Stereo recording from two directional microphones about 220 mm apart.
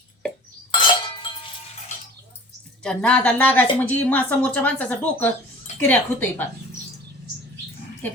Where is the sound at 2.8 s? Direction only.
5° left (ahead or behind).